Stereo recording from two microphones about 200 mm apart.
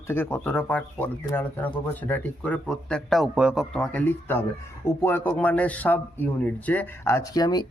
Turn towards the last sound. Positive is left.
turn(degrees=20)  # may be behind; listen again after turning